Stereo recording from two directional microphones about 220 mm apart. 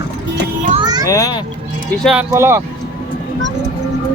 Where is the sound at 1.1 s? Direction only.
15° left (ahead or behind).